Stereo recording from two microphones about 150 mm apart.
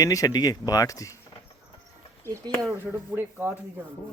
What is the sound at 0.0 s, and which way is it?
Speech, 25° left (ahead or behind).